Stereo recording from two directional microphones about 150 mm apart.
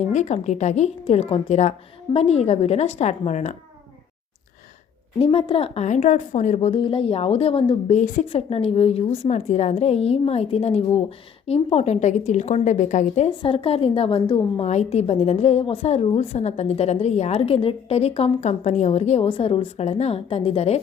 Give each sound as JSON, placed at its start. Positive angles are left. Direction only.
{"t": 0.1, "sound": "a woman's voice", "side_deg": 50}
{"t": 5.2, "sound": "a woman's voice", "side_deg": 40}
{"t": 7.9, "sound": "a woman's voice", "side_deg": 55}
{"t": 8.3, "sound": "a woman's voice", "side_deg": 40}
{"t": 13.3, "sound": "a woman's voice", "side_deg": 35}
{"t": 14.7, "sound": "a woman's voice", "side_deg": 45}